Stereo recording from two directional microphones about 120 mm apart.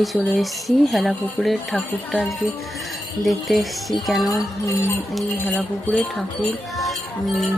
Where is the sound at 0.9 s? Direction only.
Centre (ahead or behind).